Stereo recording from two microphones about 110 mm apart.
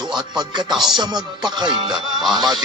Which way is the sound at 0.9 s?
40° right (ahead or behind).